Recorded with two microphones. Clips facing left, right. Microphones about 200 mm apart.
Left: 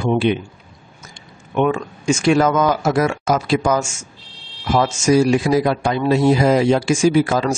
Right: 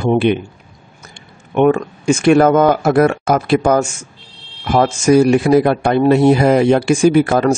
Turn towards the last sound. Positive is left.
turn(degrees=-60)  # may be behind; listen again after turning